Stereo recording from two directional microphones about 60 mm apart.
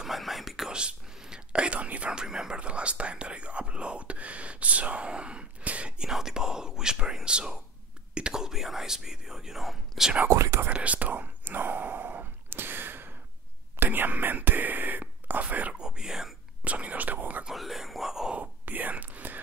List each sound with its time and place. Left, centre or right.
0.0 s whispering: centre
0.7 s whispering: centre
6.0 s whispering: centre
10.3 s whispering: right
10.7 s whispering: right
15.8 s whispering: centre
16.6 s whispering: right
17.5 s whispering: centre
18.3 s whispering: right